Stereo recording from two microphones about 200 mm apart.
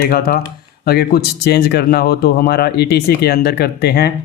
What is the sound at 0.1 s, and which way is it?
Speech, 50° left (ahead or behind).